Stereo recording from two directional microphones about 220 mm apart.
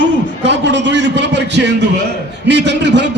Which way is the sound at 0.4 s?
55° right (ahead or behind).